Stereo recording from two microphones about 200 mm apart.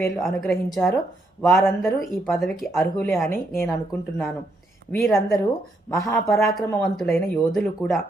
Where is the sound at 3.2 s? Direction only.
10° left (ahead or behind).